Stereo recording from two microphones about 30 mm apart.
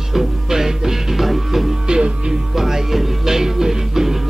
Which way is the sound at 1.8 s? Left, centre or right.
Right.